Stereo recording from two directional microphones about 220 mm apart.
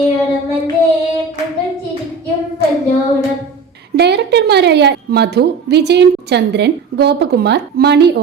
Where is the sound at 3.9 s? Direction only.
50° right (ahead or behind).